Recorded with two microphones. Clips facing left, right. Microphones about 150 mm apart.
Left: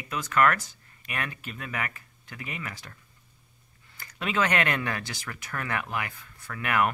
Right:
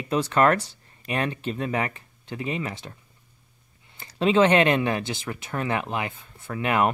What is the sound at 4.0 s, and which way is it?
Speech, 25° right (ahead or behind).